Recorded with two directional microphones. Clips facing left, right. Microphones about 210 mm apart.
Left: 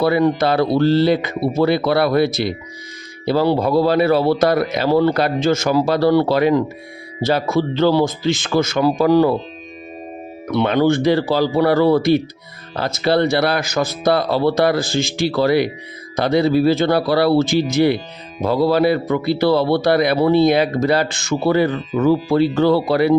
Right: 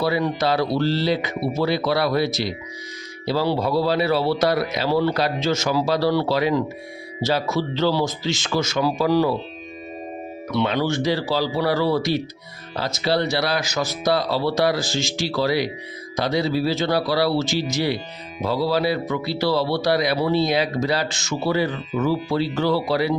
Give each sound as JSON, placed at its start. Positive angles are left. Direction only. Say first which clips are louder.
{"t": 0.0, "sound": "a man's voice", "louder": "left 6 dB", "side_deg": 55}
{"t": 10.5, "sound": "a man's voice", "louder": "left 6 dB", "side_deg": 55}